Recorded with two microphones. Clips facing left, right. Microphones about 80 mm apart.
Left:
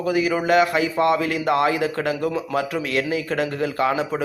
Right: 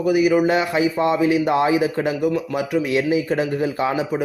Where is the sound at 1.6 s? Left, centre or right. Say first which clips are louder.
Right 2 dB; centre.